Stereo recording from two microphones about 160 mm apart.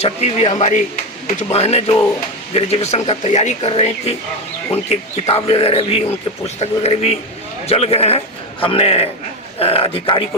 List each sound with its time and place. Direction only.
0.0 s speech: 40° left (ahead or behind)